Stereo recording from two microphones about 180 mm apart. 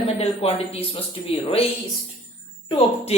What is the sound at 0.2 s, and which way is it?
Speech, 35° left (ahead or behind).